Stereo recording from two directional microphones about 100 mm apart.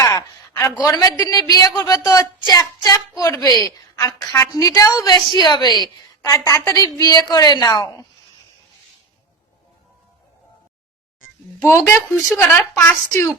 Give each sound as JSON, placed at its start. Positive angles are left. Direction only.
{"t": 0.0, "sound": "a sound", "side_deg": 30}
{"t": 0.9, "sound": "a woman's voice", "side_deg": 35}
{"t": 11.6, "sound": "a woman's voice", "side_deg": 25}
{"t": 12.3, "sound": "speech", "side_deg": 20}